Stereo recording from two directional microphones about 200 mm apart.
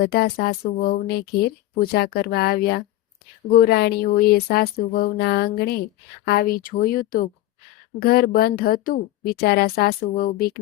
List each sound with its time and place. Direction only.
0.0 s speech: 50° left (ahead or behind)